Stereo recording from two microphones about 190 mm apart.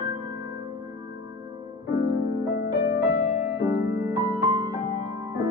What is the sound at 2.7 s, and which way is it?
Music, 15° right (ahead or behind).